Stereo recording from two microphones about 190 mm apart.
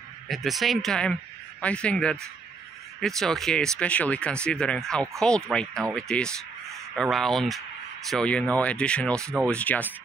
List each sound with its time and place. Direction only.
0.3 s speech: centre (ahead or behind)
9.2 s speech: 15° right (ahead or behind)
9.5 s speech: 5° left (ahead or behind)